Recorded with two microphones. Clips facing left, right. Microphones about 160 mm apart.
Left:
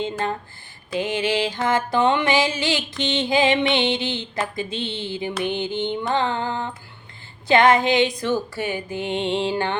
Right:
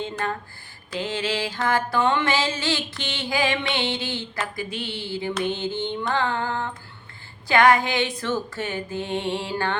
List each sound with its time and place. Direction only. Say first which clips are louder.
0.0 s mantra: left 3 dB; 20° left (ahead or behind)